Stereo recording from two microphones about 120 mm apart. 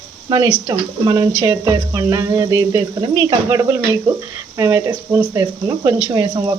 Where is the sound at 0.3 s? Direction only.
35° right (ahead or behind).